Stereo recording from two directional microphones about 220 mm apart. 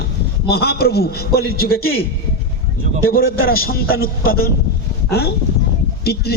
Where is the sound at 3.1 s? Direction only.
45° left (ahead or behind).